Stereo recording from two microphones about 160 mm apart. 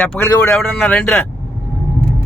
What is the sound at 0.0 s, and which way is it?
Speech, 10° left (ahead or behind).